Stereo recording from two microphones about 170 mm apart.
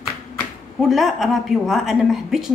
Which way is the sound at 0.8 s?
Centre (ahead or behind).